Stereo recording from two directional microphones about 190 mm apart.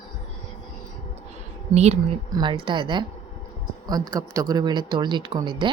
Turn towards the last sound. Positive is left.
turn(degrees=-25)  # may be behind; listen again after turning